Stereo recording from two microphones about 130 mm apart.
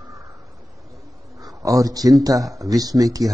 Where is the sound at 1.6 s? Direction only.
25° right (ahead or behind).